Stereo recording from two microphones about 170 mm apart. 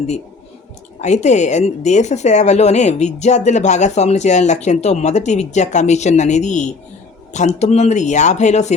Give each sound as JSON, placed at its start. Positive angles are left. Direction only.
{"t": 1.0, "sound": "speech", "side_deg": 45}